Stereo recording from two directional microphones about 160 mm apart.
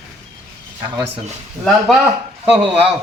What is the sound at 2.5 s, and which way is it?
Speech, 35° right (ahead or behind).